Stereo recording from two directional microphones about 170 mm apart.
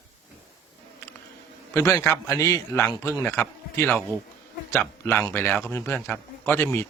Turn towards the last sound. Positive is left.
turn(degrees=10)  # may be behind; listen again after turning